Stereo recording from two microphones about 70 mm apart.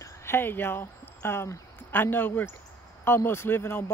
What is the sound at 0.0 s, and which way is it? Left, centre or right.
Speech, left.